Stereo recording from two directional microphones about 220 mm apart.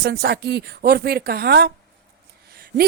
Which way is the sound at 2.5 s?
45° right (ahead or behind).